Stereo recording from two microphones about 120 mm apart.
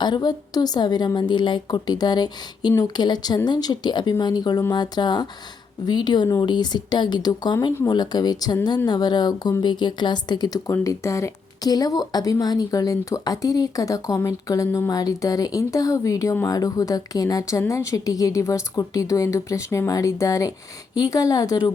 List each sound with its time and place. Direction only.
0.0 s a woman's voice: 35° left (ahead or behind)
10.7 s a woman's voice: 25° left (ahead or behind)